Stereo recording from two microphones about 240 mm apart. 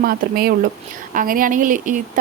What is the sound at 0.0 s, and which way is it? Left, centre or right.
Speech, right.